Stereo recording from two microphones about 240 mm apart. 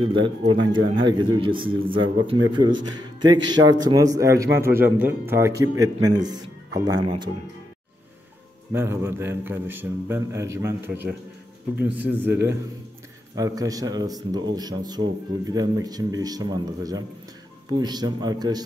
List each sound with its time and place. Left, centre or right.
0.0 s speech: centre
8.7 s speech: centre